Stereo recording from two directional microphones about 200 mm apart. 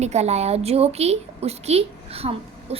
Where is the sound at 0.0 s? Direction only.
35° right (ahead or behind).